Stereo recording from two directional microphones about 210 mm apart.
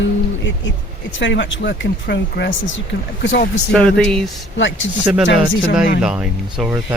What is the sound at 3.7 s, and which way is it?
Speech, 5° left (ahead or behind).